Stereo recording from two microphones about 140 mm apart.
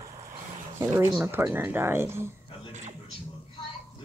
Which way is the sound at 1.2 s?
15° right (ahead or behind).